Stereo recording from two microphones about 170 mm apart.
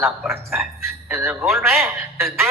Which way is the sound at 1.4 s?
Centre (ahead or behind).